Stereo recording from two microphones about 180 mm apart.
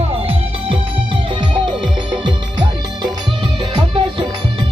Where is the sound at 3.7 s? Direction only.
25° right (ahead or behind).